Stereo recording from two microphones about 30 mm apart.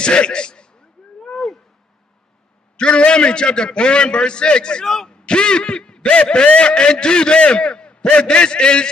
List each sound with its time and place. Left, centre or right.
0.0 s a man's voice: left
1.3 s a sound: centre
3.0 s a man's voice: left
4.8 s speech: centre
5.1 s a man's voice: left